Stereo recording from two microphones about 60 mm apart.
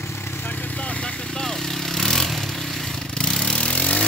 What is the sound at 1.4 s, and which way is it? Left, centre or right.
Vehicle, centre.